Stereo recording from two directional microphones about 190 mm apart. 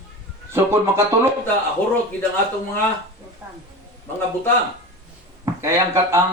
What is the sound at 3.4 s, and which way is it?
Speech, 10° right (ahead or behind).